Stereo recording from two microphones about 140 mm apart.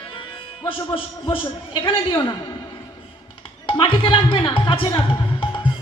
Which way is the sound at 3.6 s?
35° left (ahead or behind).